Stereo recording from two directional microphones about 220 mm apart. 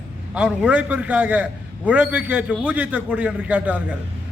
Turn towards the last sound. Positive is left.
turn(degrees=-5)  # may be behind; listen again after turning